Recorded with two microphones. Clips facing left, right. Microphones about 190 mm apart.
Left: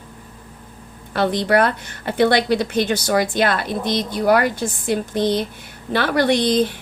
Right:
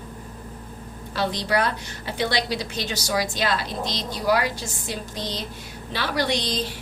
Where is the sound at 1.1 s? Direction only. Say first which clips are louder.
Left 7 dB; 55° left (ahead or behind).